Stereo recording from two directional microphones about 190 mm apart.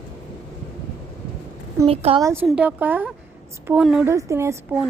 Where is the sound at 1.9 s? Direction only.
30° right (ahead or behind).